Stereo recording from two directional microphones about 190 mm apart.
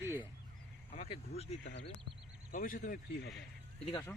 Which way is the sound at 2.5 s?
45° left (ahead or behind).